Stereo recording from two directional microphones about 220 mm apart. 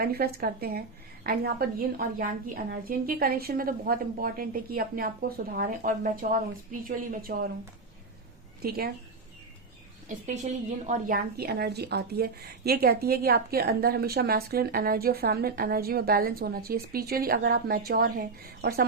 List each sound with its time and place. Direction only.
0.0 s a woman's voice: 45° right (ahead or behind)
8.6 s a woman's voice: 45° right (ahead or behind)
10.2 s a woman's voice: 35° right (ahead or behind)